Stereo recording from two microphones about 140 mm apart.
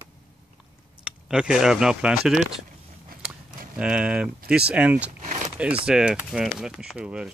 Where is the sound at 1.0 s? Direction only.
5° right (ahead or behind).